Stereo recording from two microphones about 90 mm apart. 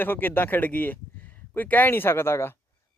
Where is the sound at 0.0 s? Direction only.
20° left (ahead or behind).